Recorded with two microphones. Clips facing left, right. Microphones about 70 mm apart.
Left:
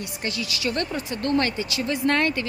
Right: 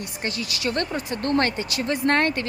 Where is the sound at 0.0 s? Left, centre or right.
Right.